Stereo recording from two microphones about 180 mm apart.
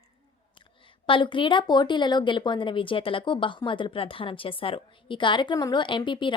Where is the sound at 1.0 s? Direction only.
30° left (ahead or behind).